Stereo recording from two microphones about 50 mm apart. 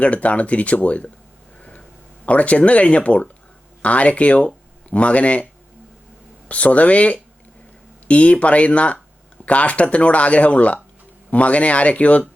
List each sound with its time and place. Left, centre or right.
0.0 s speech: left
2.2 s speech: left
6.5 s speech: left